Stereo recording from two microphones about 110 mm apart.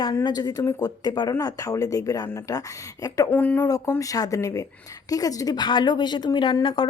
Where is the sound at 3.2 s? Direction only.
20° left (ahead or behind).